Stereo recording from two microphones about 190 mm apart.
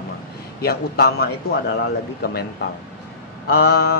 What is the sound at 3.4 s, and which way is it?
Speech, 55° left (ahead or behind).